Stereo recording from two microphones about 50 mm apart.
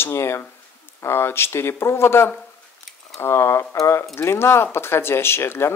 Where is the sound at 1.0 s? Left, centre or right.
Left.